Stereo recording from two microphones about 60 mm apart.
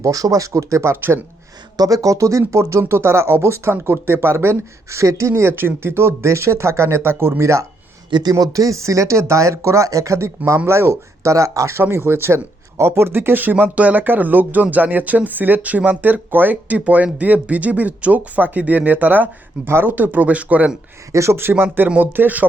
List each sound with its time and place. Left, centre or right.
0.0 s speech: right
1.7 s speech: right
5.3 s speech: right
8.3 s speech: right
11.8 s speech: right
21.1 s speech: right
21.8 s speech: right